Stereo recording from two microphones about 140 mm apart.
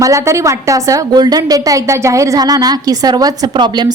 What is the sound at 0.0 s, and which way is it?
A woman's voice, 20° right (ahead or behind).